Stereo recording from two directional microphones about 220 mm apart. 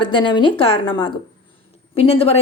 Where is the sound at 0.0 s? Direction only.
20° left (ahead or behind).